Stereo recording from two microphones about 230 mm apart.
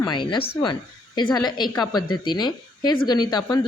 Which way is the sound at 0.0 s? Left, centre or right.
Centre.